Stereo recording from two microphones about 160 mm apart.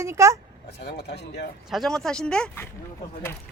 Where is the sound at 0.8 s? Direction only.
90° left.